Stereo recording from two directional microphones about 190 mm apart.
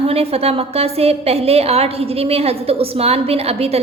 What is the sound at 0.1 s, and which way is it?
A woman's voice, 30° right (ahead or behind).